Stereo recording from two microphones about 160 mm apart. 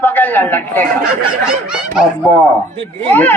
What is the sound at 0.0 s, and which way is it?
Speech, 10° left (ahead or behind).